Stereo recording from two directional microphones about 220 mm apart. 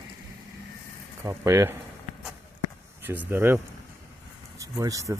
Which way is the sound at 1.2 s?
15° right (ahead or behind).